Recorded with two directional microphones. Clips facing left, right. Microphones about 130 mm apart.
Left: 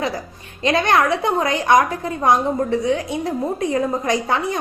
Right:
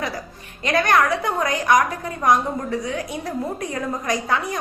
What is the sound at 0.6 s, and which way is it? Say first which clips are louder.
A woman's voice: left 2 dB; 25° left (ahead or behind).